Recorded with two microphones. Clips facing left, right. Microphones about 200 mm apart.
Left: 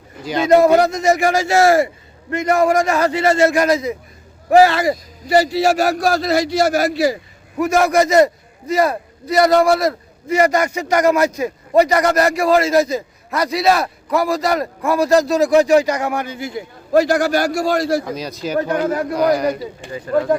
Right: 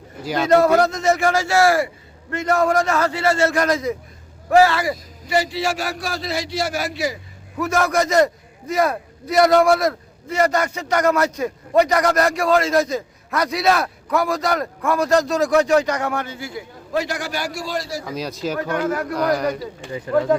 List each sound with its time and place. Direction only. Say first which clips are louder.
0.2 s a man's voice: left 2 dB; 5° right (ahead or behind)
0.4 s a man's voice: left 3 dB; 10° left (ahead or behind)
4.6 s speech: left 4 dB; 20° left (ahead or behind)
5.3 s a man's voice: left 7 dB; 40° left (ahead or behind)
7.6 s a man's voice: left 5 dB; 10° left (ahead or behind)
16.9 s a man's voice: left 10 dB; 40° left (ahead or behind)
18.0 s speech: left 2 dB; 5° right (ahead or behind)
18.6 s speech: left 3 dB; 20° left (ahead or behind)
19.2 s a man's voice: left 4 dB; 10° left (ahead or behind)